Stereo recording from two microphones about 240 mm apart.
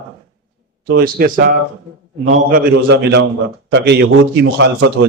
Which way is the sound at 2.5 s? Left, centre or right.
Right.